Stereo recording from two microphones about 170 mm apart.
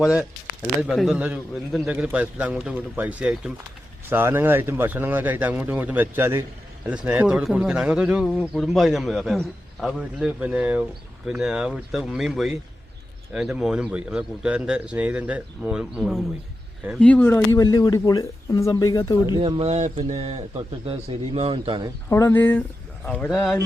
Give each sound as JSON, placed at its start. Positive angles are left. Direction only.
{"t": 0.8, "sound": "a man's voice", "side_deg": -5}
{"t": 19.4, "sound": "speech", "side_deg": -35}
{"t": 22.1, "sound": "speech", "side_deg": 15}